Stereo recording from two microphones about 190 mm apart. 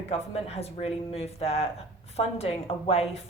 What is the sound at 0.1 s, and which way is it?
Speech, 35° left (ahead or behind).